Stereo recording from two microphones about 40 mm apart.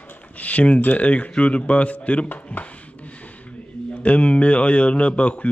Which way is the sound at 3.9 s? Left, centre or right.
Left.